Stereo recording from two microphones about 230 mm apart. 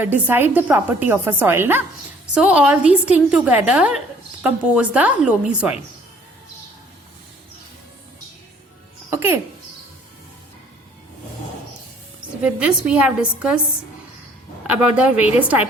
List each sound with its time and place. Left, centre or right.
0.0 s a woman's voice: centre
9.0 s music: centre
12.4 s a woman's voice: centre
14.7 s a woman's voice: centre